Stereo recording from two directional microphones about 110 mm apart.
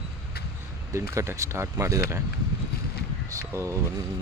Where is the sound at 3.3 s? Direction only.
25° right (ahead or behind).